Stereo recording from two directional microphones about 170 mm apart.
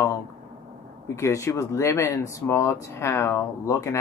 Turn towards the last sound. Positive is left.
turn(degrees=15)  # may be behind; listen again after turning